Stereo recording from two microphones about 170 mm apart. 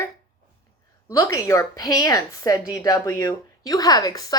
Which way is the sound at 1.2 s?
20° left (ahead or behind).